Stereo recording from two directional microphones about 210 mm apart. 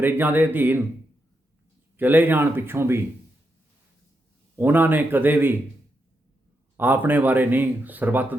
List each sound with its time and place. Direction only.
0.0 s speech: 10° right (ahead or behind)
2.0 s speech: 10° right (ahead or behind)
4.5 s speech: 10° right (ahead or behind)
6.7 s speech: 10° right (ahead or behind)